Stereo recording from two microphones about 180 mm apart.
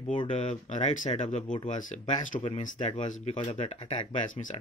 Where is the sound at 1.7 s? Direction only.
45° left (ahead or behind).